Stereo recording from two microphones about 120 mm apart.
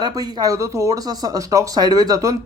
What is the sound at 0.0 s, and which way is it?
Speech, 35° right (ahead or behind).